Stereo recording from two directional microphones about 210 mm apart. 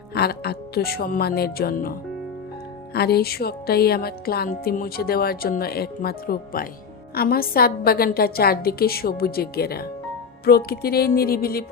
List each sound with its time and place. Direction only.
0.1 s speech: 50° left (ahead or behind)